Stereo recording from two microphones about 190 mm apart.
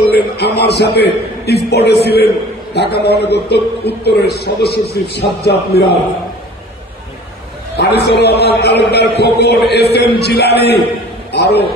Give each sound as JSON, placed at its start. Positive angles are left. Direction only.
{"t": 0.1, "sound": "a man's voice", "side_deg": 60}
{"t": 7.7, "sound": "a man's voice", "side_deg": 60}